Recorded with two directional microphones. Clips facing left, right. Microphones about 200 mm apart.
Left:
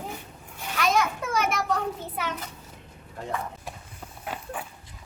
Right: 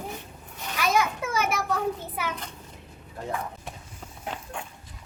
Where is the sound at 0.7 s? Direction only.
5° right (ahead or behind).